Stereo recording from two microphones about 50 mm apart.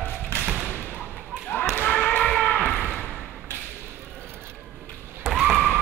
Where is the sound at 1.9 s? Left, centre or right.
Left.